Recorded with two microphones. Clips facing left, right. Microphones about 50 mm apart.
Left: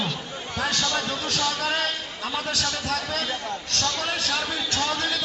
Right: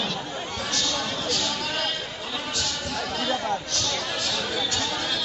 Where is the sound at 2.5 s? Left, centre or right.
Left.